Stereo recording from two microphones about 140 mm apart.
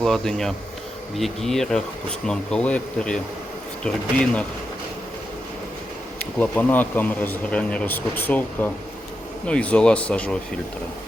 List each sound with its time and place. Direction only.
0.0 s speech: 5° left (ahead or behind)
6.1 s speech: 10° left (ahead or behind)